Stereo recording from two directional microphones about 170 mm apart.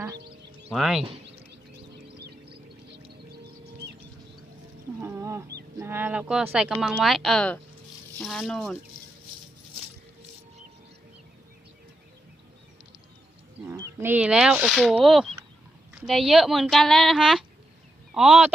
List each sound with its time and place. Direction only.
0.7 s speech: centre (ahead or behind)
1.8 s a sound: 70° right (ahead or behind)
3.3 s music: 70° right (ahead or behind)
4.9 s a sound: 15° right (ahead or behind)
5.7 s speech: 15° right (ahead or behind)
14.0 s speech: 10° right (ahead or behind)